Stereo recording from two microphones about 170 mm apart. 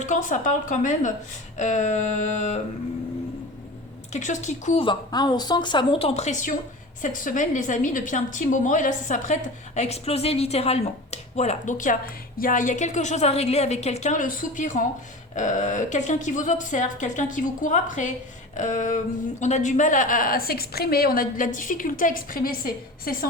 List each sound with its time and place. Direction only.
0.0 s a woman's voice: 50° left (ahead or behind)
4.1 s a woman's voice: 45° left (ahead or behind)
4.8 s a woman's voice: 25° left (ahead or behind); by 23.3 s 60° left (ahead or behind)